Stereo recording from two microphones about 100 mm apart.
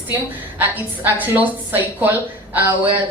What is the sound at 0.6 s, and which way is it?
A woman's voice, 15° right (ahead or behind).